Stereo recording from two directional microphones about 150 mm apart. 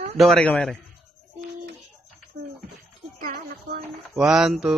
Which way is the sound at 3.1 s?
75° right (ahead or behind).